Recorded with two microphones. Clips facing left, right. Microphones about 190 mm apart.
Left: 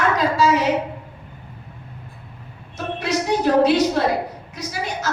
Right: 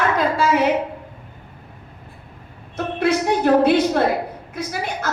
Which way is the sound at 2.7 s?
55° right (ahead or behind).